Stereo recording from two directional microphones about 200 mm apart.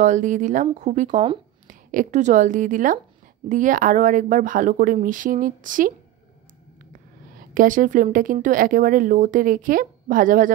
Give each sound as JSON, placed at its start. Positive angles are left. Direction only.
{"t": 0.0, "sound": "speech", "side_deg": -40}